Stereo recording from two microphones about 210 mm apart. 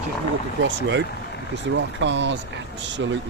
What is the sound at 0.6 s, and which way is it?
Speech, 60° right (ahead or behind).